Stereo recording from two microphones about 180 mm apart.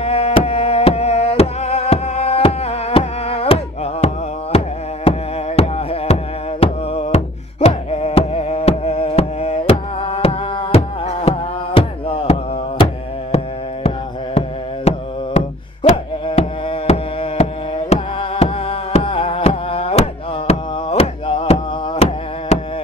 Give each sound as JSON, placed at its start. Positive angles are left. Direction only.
{"t": 0.0, "sound": "music", "side_deg": 35}
{"t": 14.9, "sound": "music", "side_deg": 35}